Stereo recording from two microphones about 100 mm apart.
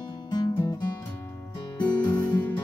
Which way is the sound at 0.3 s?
45° left (ahead or behind).